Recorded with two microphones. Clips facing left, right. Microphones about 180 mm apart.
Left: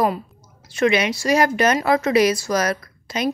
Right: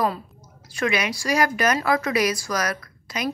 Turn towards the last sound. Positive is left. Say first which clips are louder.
# left 5 dB
turn(degrees=25)  # may be behind; listen again after turning